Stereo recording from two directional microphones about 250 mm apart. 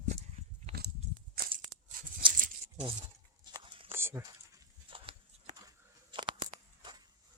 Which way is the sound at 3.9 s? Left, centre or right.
Centre.